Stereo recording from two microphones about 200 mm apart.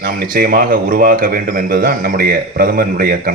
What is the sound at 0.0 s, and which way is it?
A man's voice, 50° right (ahead or behind).